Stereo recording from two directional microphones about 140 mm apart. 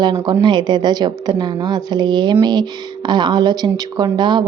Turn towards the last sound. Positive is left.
turn(degrees=-30)  # may be behind; listen again after turning